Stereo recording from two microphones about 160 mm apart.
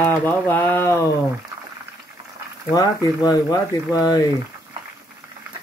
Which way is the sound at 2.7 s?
25° left (ahead or behind).